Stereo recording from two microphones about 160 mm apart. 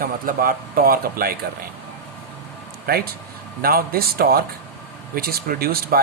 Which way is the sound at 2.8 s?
75° right (ahead or behind).